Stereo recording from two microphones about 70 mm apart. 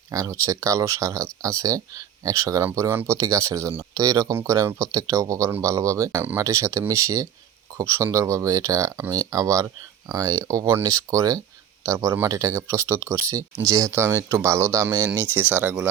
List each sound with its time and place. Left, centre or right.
0.1 s speech: right
2.9 s speech: right
3.2 s speech: right
4.4 s speech: right
10.8 s speech: right
14.8 s speech: right